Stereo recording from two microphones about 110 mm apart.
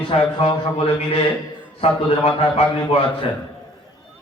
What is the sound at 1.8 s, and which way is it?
A man's voice, 70° left (ahead or behind).